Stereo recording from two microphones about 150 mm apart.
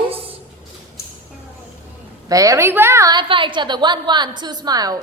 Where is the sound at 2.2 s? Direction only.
20° right (ahead or behind).